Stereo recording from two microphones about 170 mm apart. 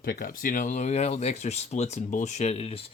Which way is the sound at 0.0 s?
55° left (ahead or behind).